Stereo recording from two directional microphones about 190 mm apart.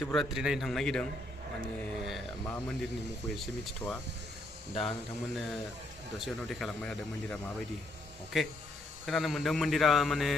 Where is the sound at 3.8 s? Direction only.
10° left (ahead or behind).